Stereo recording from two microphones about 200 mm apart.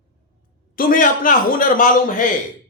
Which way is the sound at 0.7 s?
45° left (ahead or behind).